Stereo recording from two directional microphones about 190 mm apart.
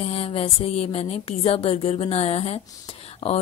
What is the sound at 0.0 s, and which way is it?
Speech, 30° left (ahead or behind).